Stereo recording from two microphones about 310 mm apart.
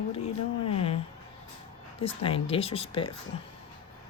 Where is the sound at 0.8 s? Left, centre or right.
Centre.